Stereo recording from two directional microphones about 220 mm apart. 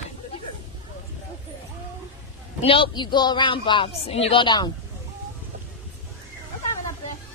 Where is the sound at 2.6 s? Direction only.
25° left (ahead or behind).